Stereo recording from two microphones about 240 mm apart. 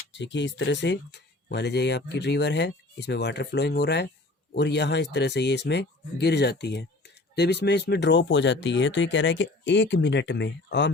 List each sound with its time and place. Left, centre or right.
0.1 s speech: left